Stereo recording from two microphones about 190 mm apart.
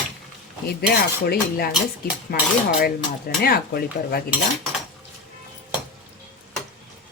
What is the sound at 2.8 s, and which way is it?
Speech, 55° left (ahead or behind).